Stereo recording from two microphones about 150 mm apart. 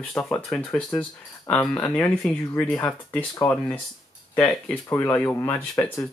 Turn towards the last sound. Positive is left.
turn(degrees=15)  # may be behind; listen again after turning